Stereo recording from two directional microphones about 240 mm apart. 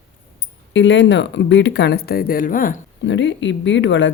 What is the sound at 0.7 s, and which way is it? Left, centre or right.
Speech, left.